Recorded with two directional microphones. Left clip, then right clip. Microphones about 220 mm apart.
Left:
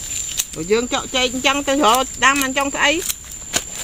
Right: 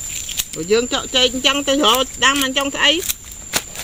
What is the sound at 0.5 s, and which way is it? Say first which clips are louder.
Speech: right 2 dB; 5° right (ahead or behind).